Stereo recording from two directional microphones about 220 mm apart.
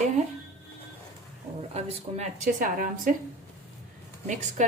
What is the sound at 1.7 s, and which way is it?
A woman's voice, 30° right (ahead or behind).